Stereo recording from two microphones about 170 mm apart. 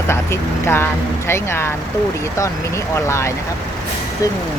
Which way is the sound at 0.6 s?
15° left (ahead or behind).